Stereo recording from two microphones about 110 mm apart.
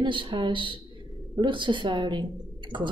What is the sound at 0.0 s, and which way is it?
A woman's voice, 50° right (ahead or behind).